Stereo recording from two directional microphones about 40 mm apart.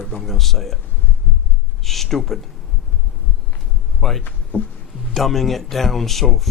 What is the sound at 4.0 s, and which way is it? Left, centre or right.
Speech, centre.